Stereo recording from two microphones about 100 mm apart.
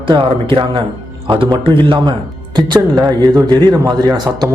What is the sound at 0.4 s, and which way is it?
A man's voice, 55° right (ahead or behind).